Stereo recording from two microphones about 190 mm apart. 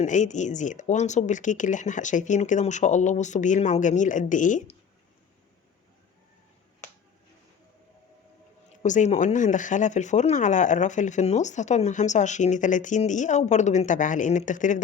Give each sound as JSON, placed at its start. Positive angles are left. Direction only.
{"t": 0.0, "sound": "speech", "side_deg": 40}
{"t": 8.8, "sound": "speech", "side_deg": 40}